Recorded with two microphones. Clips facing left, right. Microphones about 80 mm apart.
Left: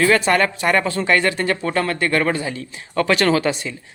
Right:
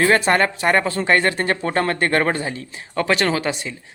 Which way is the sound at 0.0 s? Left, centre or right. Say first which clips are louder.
Even; right.